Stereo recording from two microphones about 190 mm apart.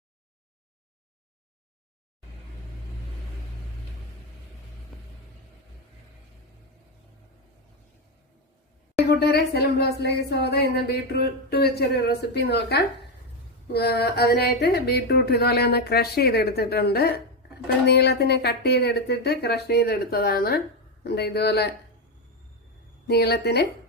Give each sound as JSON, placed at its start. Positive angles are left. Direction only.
{"t": 9.0, "sound": "speech", "side_deg": 55}
{"t": 23.0, "sound": "speech", "side_deg": 60}